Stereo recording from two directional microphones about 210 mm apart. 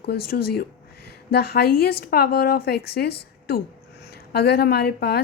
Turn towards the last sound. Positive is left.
turn(degrees=50)  # may be behind; listen again after turning